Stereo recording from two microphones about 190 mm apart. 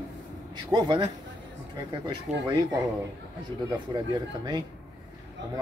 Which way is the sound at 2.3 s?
40° right (ahead or behind).